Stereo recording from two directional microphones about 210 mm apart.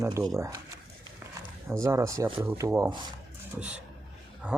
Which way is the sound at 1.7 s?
15° right (ahead or behind).